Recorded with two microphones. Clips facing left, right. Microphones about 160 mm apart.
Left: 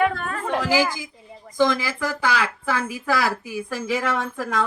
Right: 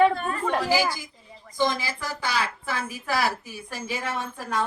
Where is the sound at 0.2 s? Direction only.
90° left.